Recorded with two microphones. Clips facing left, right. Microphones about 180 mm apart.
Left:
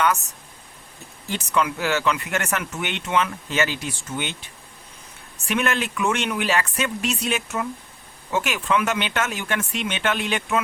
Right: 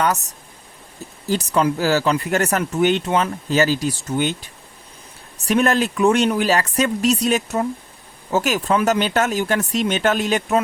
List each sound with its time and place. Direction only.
0.0 s speech: 35° right (ahead or behind)
1.3 s speech: 35° right (ahead or behind)